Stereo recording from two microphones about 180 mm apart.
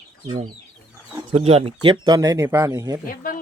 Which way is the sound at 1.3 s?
35° right (ahead or behind).